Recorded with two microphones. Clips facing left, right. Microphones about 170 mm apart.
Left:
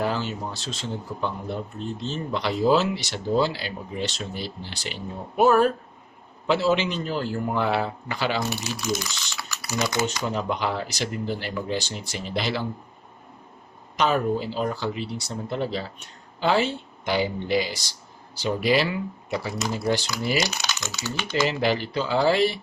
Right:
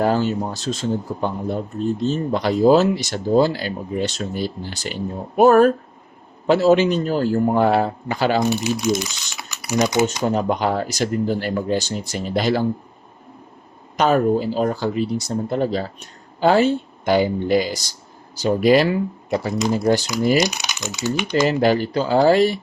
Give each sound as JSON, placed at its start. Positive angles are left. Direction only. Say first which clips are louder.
{"t": 0.0, "sound": "speech", "louder": "right 8 dB", "side_deg": -45}
{"t": 8.4, "sound": "speech", "louder": "right 9 dB", "side_deg": -20}
{"t": 9.4, "sound": "typing", "louder": "right 8 dB", "side_deg": -20}
{"t": 10.2, "sound": "speech", "louder": "right 7 dB", "side_deg": -45}
{"t": 13.9, "sound": "speech", "louder": "right 6 dB", "side_deg": -45}
{"t": 20.4, "sound": "speech", "louder": "right 6 dB", "side_deg": -15}
{"t": 21.4, "sound": "speech", "louder": "right 6 dB", "side_deg": -45}